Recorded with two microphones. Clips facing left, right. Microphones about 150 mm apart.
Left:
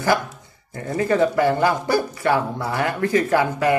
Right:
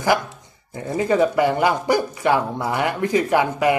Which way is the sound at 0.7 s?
15° right (ahead or behind).